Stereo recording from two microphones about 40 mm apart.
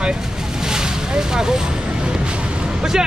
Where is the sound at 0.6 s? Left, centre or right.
Centre.